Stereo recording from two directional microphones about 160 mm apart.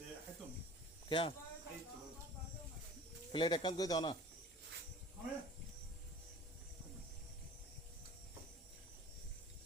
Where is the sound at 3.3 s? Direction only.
30° left (ahead or behind).